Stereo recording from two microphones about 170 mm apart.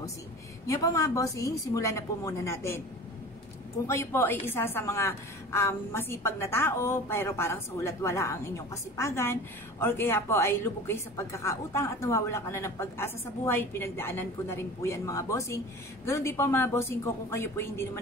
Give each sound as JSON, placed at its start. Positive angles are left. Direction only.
{"t": 0.7, "sound": "a woman's voice", "side_deg": 20}
{"t": 3.8, "sound": "a woman's voice", "side_deg": 15}